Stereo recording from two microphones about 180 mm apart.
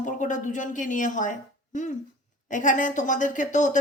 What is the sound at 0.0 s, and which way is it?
Speech, 45° left (ahead or behind).